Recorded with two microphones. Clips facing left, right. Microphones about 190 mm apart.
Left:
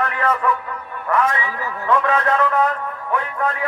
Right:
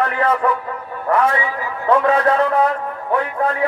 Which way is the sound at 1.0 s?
35° right (ahead or behind).